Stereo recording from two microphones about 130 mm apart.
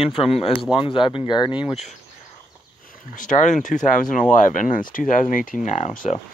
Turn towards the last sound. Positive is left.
turn(degrees=75)  # may be behind; listen again after turning